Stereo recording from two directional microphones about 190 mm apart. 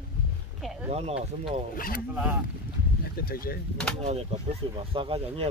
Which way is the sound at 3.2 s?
50° left (ahead or behind).